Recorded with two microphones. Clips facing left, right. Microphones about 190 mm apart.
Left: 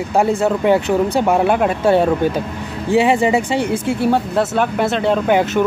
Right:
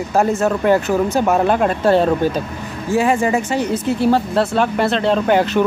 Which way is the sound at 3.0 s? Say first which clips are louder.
Left 2 dB; 15° left (ahead or behind).